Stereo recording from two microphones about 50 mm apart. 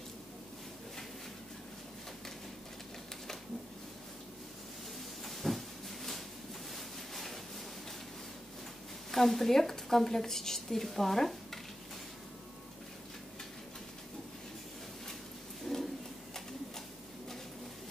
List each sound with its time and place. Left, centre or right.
5.2 s vehicle: centre
6.7 s ocean: centre
9.1 s a woman's voice: centre
15.6 s a sound: centre